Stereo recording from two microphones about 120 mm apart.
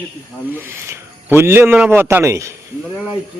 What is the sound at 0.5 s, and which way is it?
A man's voice, 20° right (ahead or behind).